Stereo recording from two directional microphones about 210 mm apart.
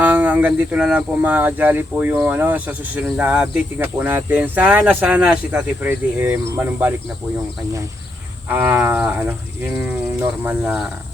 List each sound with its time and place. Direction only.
0.0 s speech: 10° right (ahead or behind)
8.5 s speech: 10° right (ahead or behind)